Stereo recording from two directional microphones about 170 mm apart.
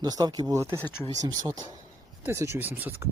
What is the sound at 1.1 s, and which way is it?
Speech, 20° right (ahead or behind).